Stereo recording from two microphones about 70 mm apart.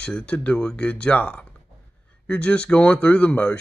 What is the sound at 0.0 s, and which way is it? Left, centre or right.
Speech, centre.